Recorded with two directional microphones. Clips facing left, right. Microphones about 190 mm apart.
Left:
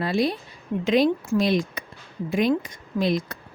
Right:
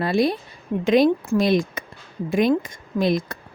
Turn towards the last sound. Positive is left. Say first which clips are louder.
# right 2 dB
turn(degrees=-50)  # may be behind; listen again after turning